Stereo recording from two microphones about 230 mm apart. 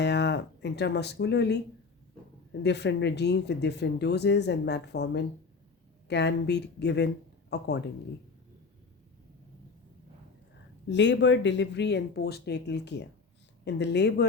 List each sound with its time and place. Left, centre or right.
0.0 s speech: left
10.8 s speech: left